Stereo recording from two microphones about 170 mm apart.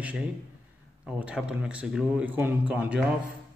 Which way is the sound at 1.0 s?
5° right (ahead or behind).